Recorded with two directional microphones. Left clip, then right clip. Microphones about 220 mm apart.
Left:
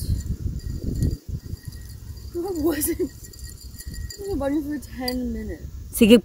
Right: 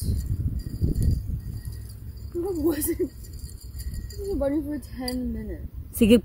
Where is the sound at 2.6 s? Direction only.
35° left (ahead or behind).